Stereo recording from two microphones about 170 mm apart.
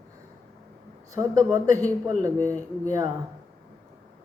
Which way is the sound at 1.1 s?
20° right (ahead or behind).